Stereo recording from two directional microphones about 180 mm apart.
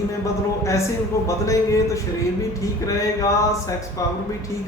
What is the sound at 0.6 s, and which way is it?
A man's voice, 15° left (ahead or behind).